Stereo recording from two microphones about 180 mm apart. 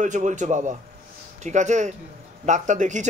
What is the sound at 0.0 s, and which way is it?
A man's voice, 45° right (ahead or behind).